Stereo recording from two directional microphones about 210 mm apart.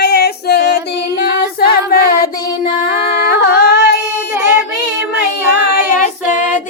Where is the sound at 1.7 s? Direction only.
45° left (ahead or behind).